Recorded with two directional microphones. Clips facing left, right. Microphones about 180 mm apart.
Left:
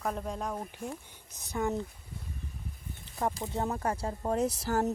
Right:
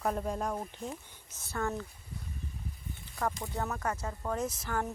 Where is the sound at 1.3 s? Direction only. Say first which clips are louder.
Left 3 dB; 15° left (ahead or behind).